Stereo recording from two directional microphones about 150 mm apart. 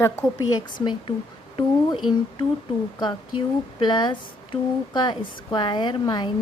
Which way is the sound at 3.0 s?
30° left (ahead or behind).